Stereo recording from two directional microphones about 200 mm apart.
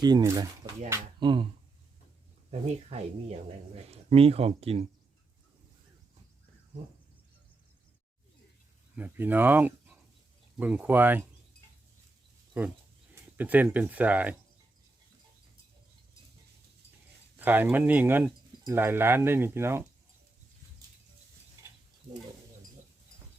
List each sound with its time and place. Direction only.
0.0 s speech: 20° right (ahead or behind)
2.5 s speech: 30° right (ahead or behind)
9.0 s speech: 10° right (ahead or behind)
12.6 s speech: 10° right (ahead or behind)
17.3 s speech: 10° right (ahead or behind)
21.6 s stir: 15° right (ahead or behind)